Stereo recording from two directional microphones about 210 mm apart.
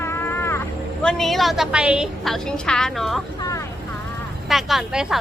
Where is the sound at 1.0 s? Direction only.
Centre (ahead or behind).